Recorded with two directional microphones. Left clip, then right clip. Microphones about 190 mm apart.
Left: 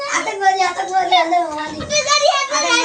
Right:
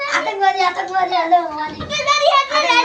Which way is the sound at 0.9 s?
10° left (ahead or behind).